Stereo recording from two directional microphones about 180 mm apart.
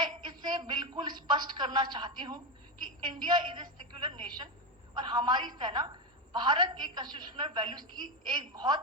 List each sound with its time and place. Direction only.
0.0 s speech: 25° right (ahead or behind)